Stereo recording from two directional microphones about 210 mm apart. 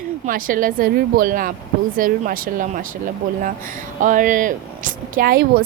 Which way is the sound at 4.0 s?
40° right (ahead or behind).